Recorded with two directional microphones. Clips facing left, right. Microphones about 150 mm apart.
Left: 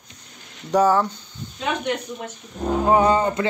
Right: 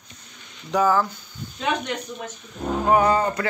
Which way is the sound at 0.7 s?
30° left (ahead or behind).